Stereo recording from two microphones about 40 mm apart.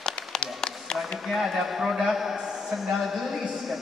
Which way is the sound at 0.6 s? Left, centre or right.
Centre.